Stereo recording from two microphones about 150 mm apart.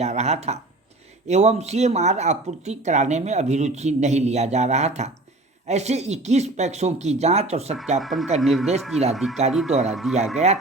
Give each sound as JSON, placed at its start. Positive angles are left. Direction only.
{"t": 0.0, "sound": "speech", "side_deg": -45}
{"t": 7.9, "sound": "speech", "side_deg": 0}
{"t": 10.3, "sound": "speech", "side_deg": -45}